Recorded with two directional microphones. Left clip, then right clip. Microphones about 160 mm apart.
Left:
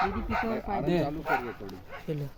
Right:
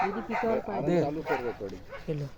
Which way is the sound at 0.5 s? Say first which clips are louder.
Right 1 dB; 50° left (ahead or behind).